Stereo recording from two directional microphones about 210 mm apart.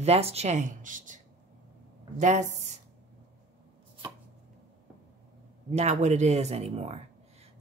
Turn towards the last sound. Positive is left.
turn(degrees=-30)  # may be behind; listen again after turning